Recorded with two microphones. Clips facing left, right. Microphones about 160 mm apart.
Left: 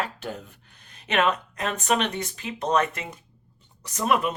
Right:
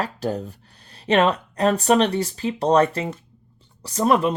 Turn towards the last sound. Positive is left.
turn(degrees=-35)  # may be behind; listen again after turning